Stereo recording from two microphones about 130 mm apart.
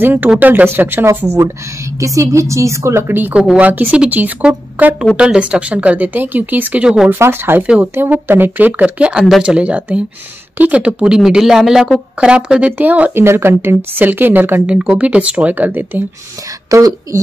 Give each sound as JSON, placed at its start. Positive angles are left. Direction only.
{"t": 0.0, "sound": "a woman's voice", "side_deg": -15}
{"t": 7.1, "sound": "a woman's voice", "side_deg": -20}